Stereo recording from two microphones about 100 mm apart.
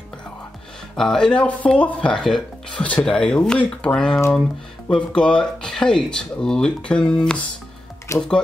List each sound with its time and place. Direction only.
0.9 s speech: 5° left (ahead or behind)
8.1 s speech: 30° left (ahead or behind)